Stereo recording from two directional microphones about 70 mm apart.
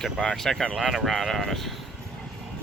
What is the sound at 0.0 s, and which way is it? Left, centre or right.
Speech, centre.